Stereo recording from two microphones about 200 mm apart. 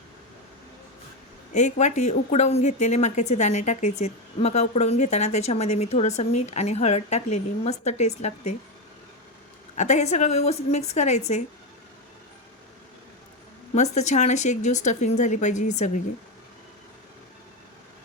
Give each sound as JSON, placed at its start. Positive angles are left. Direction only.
{"t": 1.5, "sound": "speech", "side_deg": 35}
{"t": 9.7, "sound": "speech", "side_deg": 35}
{"t": 13.7, "sound": "speech", "side_deg": 35}